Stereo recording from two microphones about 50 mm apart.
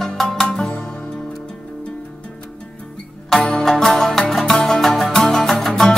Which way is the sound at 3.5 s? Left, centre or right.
Centre.